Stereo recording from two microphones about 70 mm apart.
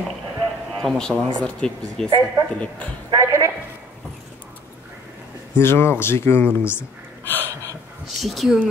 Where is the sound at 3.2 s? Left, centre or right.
Right.